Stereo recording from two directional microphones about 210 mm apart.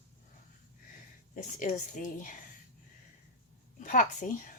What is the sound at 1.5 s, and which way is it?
Speech, 40° left (ahead or behind).